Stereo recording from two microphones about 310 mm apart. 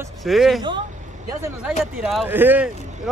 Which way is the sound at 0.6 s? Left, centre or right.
Centre.